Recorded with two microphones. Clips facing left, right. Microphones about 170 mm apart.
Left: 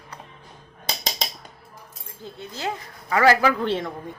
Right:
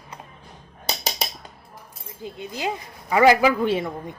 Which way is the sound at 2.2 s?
15° right (ahead or behind).